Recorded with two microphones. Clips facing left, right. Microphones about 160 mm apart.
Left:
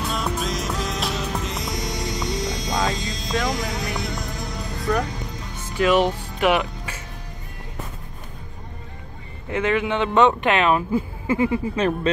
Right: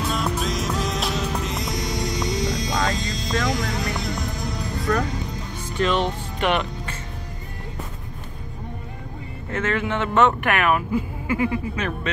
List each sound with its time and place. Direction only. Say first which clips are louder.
0.1 s music: right 1 dB; centre (ahead or behind)
5.8 s speech: left 4 dB; 10° left (ahead or behind)
9.5 s speech: left 3 dB; 15° left (ahead or behind); by 12.1 s 30° left (ahead or behind)